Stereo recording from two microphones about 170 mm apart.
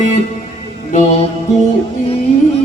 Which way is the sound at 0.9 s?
35° left (ahead or behind).